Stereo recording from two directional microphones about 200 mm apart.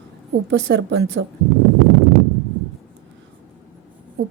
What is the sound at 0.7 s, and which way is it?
Speech, 55° right (ahead or behind).